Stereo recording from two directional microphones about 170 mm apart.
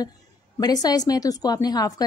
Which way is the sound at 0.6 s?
20° left (ahead or behind).